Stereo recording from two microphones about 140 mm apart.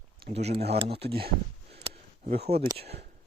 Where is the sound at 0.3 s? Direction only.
50° right (ahead or behind).